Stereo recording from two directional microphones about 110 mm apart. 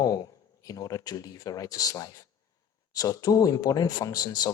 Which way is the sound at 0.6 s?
35° left (ahead or behind).